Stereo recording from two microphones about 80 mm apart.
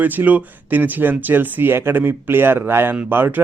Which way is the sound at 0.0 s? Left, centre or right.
Right.